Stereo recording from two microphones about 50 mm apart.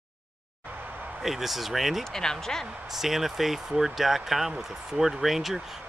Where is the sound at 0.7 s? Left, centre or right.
Right.